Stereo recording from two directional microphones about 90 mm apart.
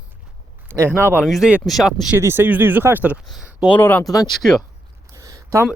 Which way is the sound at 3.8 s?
20° left (ahead or behind).